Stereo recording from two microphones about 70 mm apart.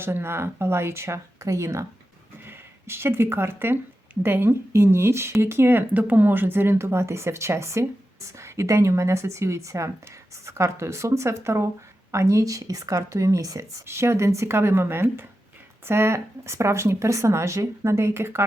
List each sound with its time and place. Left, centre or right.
0.0 s speech: right
2.4 s speech: right
13.8 s speech: right